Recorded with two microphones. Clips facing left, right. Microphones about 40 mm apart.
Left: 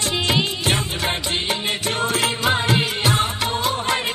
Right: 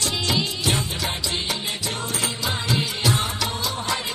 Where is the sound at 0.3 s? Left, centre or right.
Left.